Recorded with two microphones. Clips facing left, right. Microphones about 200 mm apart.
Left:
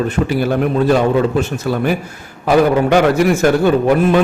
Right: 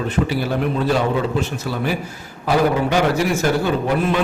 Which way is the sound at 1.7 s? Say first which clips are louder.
Left 7 dB; 55° left (ahead or behind).